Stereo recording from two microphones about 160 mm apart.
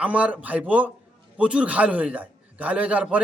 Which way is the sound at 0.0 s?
10° right (ahead or behind).